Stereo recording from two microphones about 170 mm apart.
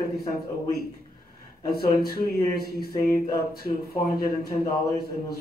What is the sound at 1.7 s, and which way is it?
Speech, 65° left (ahead or behind).